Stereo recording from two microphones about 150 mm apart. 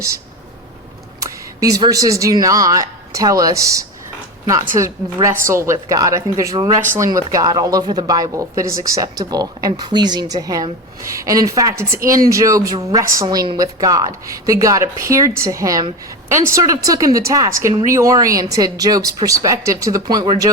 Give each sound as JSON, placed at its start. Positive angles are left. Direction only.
{"t": 1.2, "sound": "speech", "side_deg": -25}
{"t": 5.3, "sound": "speech", "side_deg": -20}